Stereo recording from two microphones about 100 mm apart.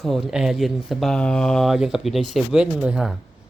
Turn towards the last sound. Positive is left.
turn(degrees=-10)  # may be behind; listen again after turning